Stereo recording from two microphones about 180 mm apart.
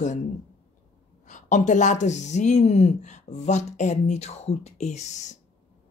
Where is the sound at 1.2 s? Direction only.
45° left (ahead or behind).